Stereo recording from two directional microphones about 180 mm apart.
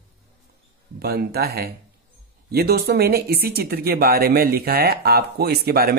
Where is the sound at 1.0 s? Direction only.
60° right (ahead or behind).